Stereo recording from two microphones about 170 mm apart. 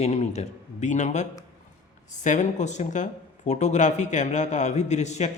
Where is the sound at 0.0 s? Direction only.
40° left (ahead or behind).